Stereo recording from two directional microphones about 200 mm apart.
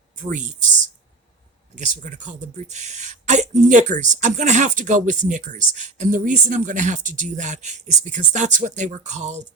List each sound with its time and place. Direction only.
0.2 s speech: 40° right (ahead or behind)
1.7 s speech: 40° right (ahead or behind)